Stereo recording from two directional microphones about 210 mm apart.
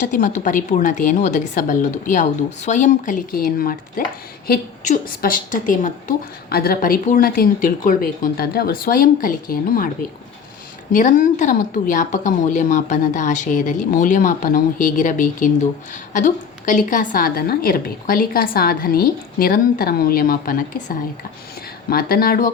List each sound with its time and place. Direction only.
0.1 s a woman's voice: 40° left (ahead or behind)
10.9 s a woman's voice: 40° left (ahead or behind)